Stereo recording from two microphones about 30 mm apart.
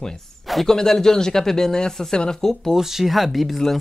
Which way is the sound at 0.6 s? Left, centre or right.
Centre.